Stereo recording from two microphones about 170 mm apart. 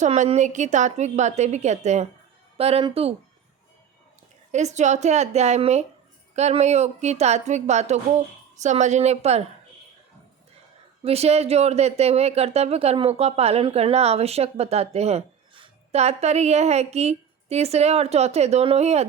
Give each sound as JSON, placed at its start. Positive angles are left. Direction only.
{"t": 0.0, "sound": "a woman's voice", "side_deg": -40}
{"t": 4.5, "sound": "speech", "side_deg": -45}
{"t": 11.0, "sound": "speech", "side_deg": -35}